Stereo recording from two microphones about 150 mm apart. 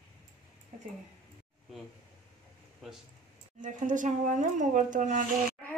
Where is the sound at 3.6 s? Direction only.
60° right (ahead or behind).